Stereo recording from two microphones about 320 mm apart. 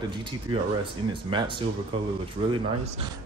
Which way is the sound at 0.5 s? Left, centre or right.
Centre.